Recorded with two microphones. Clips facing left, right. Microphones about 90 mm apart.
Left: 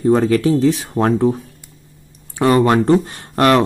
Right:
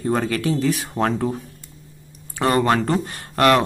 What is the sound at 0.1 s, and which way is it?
Speech, 30° left (ahead or behind).